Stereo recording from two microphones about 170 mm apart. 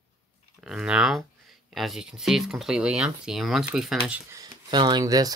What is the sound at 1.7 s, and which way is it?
Speech, centre (ahead or behind).